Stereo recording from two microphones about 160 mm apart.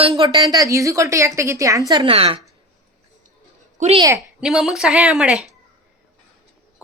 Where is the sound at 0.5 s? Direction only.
20° right (ahead or behind).